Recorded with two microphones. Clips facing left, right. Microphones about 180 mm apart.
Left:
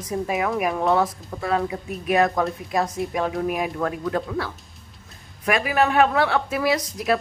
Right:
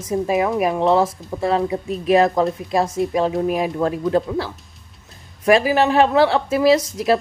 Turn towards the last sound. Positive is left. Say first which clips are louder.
# right 6 dB
turn(degrees=-30)  # may be behind; listen again after turning